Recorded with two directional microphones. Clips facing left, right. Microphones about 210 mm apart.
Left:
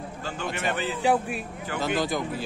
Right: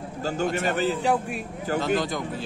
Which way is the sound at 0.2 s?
40° right (ahead or behind).